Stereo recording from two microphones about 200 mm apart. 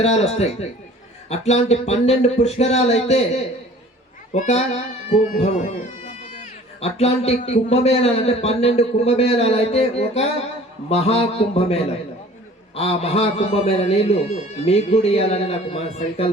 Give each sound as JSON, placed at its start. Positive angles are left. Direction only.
{"t": 0.0, "sound": "a man's voice", "side_deg": 30}